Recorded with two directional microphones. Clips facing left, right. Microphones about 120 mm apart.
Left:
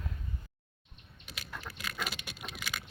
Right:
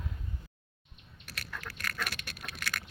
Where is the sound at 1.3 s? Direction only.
10° left (ahead or behind).